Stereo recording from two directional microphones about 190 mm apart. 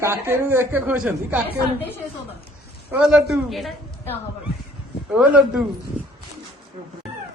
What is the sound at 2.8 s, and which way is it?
Speech, 5° right (ahead or behind).